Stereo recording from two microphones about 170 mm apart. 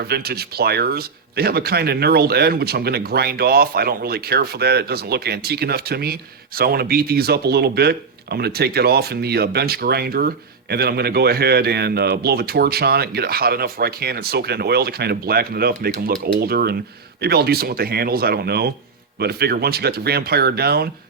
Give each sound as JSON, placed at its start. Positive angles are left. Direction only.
{"t": 0.0, "sound": "speech", "side_deg": -65}